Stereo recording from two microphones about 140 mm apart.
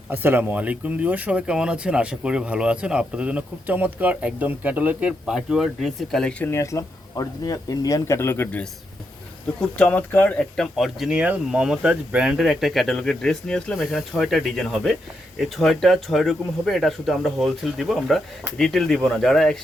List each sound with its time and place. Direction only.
0.1 s speech: 15° right (ahead or behind); by 6.5 s 5° left (ahead or behind)
6.5 s speech: 20° left (ahead or behind); by 19.5 s centre (ahead or behind)